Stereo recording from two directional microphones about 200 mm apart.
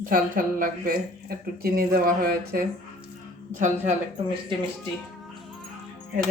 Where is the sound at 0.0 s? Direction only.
45° right (ahead or behind).